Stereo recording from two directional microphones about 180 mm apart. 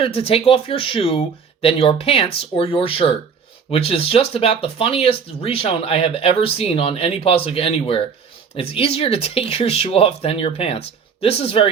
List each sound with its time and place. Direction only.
0.0 s speech: 30° left (ahead or behind)